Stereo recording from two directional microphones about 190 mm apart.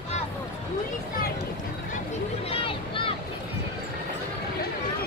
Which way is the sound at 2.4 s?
30° left (ahead or behind).